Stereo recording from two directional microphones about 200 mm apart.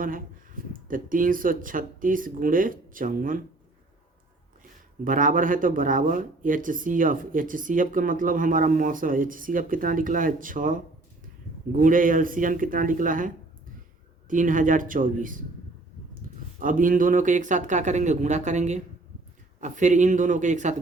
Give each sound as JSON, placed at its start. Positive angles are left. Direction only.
{"t": 0.0, "sound": "speech", "side_deg": -45}
{"t": 5.0, "sound": "speech", "side_deg": -40}
{"t": 11.8, "sound": "speech", "side_deg": -40}
{"t": 16.6, "sound": "speech", "side_deg": -40}